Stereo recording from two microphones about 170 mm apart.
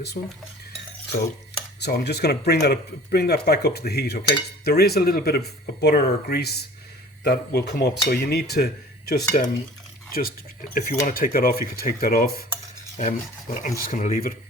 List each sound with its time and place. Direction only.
0.2 s speech: 45° left (ahead or behind)
1.8 s speech: 75° left (ahead or behind)
11.0 s dishes: 60° left (ahead or behind)
13.0 s speech: 50° left (ahead or behind)
13.8 s dishes: 55° left (ahead or behind)